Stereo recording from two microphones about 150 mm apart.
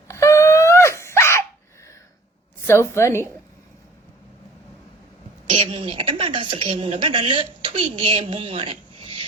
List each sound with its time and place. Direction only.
0.1 s wail: 20° left (ahead or behind)
2.6 s a woman's voice: 15° left (ahead or behind)
5.5 s a woman's voice: 40° right (ahead or behind)